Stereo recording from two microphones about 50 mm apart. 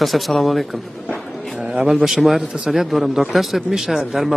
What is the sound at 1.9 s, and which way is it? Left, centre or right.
Speech, centre.